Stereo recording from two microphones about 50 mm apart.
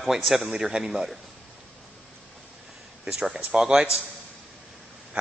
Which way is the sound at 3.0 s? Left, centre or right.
Centre.